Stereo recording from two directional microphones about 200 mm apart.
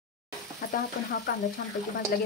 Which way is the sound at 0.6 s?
50° left (ahead or behind).